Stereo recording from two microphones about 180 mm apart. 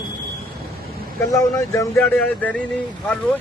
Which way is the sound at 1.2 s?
15° left (ahead or behind).